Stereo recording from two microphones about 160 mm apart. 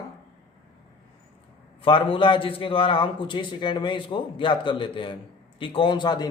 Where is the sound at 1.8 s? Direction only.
30° left (ahead or behind).